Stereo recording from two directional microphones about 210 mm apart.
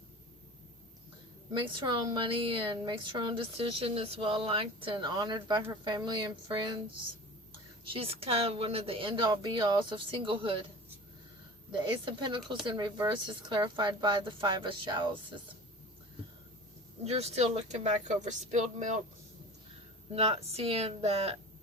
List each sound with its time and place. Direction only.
1.5 s a woman's voice: 25° right (ahead or behind)
7.9 s a woman's voice: 25° right (ahead or behind)
11.9 s a woman's voice: 20° right (ahead or behind)
17.0 s speech: 30° right (ahead or behind)
20.1 s a woman's voice: 30° right (ahead or behind)